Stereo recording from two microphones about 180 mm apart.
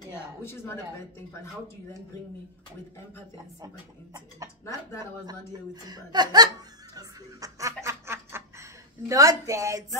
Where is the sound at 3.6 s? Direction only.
20° right (ahead or behind).